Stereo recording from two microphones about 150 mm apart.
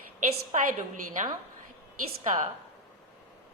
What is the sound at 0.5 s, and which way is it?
Speech, 55° right (ahead or behind).